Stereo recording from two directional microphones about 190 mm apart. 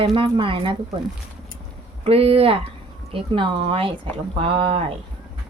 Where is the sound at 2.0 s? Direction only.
30° right (ahead or behind).